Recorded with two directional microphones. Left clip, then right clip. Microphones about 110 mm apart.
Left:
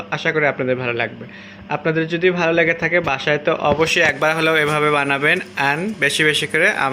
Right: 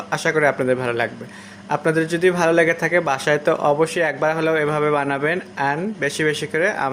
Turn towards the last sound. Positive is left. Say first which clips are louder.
# left 4 dB
turn(degrees=-15)  # may be behind; listen again after turning